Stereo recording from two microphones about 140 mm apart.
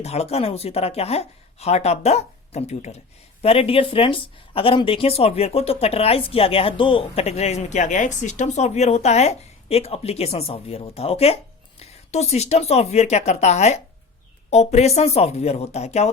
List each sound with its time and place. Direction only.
0.0 s speech: 50° left (ahead or behind)